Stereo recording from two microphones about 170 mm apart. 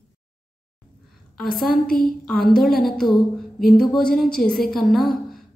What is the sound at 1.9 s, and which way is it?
Speech, 60° left (ahead or behind).